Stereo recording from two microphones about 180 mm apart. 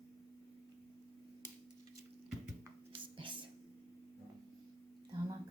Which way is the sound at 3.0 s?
30° right (ahead or behind).